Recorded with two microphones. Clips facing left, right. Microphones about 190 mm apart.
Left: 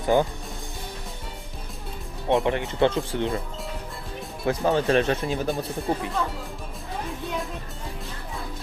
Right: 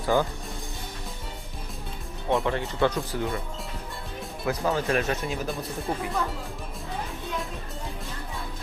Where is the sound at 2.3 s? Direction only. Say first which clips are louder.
Left 3 dB; 20° left (ahead or behind).